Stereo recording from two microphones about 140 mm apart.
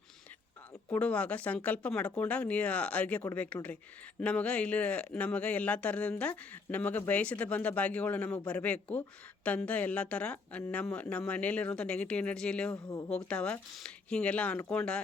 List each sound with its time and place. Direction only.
0.9 s speech: 10° left (ahead or behind)
12.7 s speech: 25° left (ahead or behind)
13.1 s speech: 5° left (ahead or behind)